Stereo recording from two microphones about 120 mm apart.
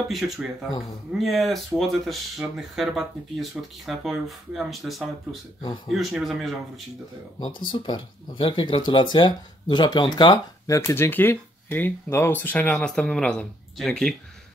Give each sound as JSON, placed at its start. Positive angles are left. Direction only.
{"t": 0.1, "sound": "speech", "side_deg": 0}
{"t": 7.3, "sound": "speech", "side_deg": 40}
{"t": 10.8, "sound": "speech", "side_deg": 20}